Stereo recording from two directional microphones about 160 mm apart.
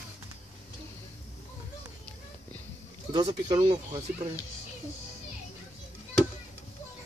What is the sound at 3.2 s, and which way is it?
Speech, 40° right (ahead or behind).